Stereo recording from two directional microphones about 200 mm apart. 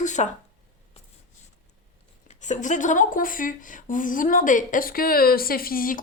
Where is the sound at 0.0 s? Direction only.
35° left (ahead or behind).